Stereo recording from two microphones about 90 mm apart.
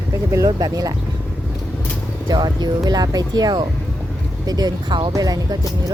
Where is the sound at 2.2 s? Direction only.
50° right (ahead or behind).